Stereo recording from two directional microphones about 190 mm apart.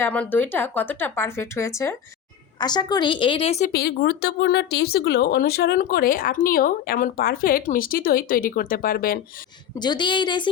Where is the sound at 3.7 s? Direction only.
55° left (ahead or behind).